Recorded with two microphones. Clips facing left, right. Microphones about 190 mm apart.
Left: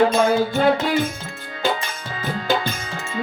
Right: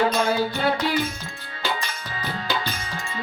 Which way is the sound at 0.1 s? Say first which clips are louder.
Left 5 dB; 50° left (ahead or behind).